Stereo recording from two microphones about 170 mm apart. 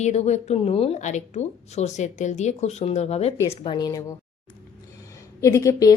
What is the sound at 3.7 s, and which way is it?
Speech, 20° left (ahead or behind).